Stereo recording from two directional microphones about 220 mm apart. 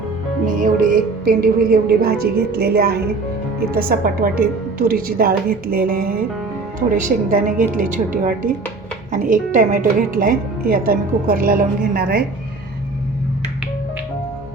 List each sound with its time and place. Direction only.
0.4 s a woman's voice: 35° right (ahead or behind)